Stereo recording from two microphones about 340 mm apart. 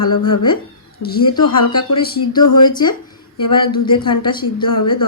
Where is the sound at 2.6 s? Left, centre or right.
Centre.